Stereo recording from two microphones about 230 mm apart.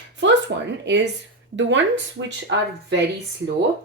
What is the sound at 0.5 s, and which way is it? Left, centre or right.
Speech, right.